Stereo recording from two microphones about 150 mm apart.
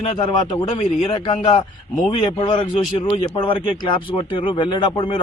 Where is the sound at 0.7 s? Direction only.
50° left (ahead or behind).